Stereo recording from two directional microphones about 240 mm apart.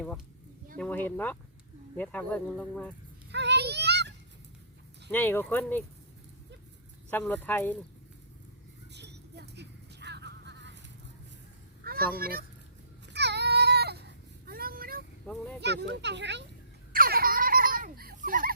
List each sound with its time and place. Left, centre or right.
0.8 s speech: centre
3.3 s child singing: right
5.1 s speech: centre
7.1 s speech: centre
8.9 s a sound: right
12.1 s a child's voice: right
13.1 s a sound: right
15.3 s speech: centre
15.6 s speech: right
16.9 s fowl: right